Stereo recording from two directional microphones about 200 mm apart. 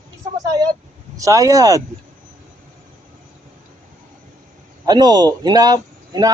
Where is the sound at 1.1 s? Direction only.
15° right (ahead or behind).